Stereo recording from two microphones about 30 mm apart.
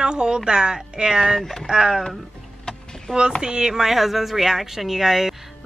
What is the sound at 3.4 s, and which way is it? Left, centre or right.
Speech, right.